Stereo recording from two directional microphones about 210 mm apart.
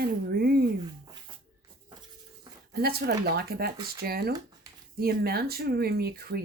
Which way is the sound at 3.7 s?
20° right (ahead or behind).